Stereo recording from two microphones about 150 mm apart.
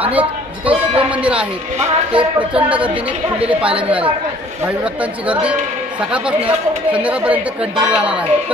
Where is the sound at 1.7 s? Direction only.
50° right (ahead or behind).